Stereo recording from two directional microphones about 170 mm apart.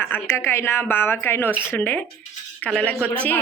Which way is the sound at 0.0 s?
15° left (ahead or behind).